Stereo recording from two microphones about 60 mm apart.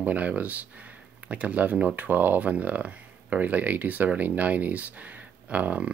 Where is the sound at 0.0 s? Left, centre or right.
Right.